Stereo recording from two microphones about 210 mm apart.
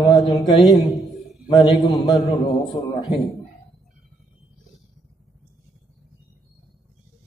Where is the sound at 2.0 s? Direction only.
15° left (ahead or behind).